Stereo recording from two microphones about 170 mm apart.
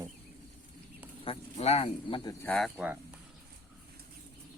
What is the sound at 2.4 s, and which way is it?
Speech, 5° left (ahead or behind).